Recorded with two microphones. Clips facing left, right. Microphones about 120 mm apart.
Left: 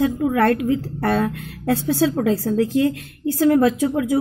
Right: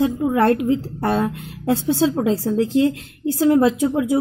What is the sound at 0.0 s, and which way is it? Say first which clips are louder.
A woman's voice: right 1 dB; 25° right (ahead or behind).